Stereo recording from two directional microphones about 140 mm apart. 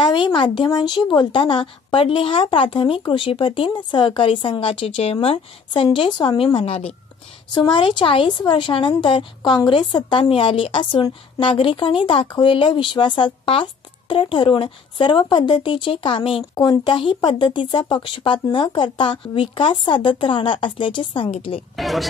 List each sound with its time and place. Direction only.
0.0 s a woman's voice: 35° left (ahead or behind)
21.7 s speech: centre (ahead or behind)